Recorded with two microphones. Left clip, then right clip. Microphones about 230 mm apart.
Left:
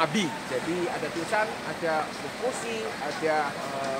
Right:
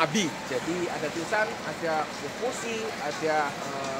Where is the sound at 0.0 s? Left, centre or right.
Right.